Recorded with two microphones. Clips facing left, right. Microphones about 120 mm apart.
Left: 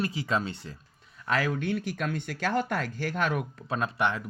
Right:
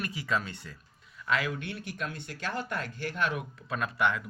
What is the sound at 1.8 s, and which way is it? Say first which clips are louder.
Speech: left 6 dB; 55° left (ahead or behind).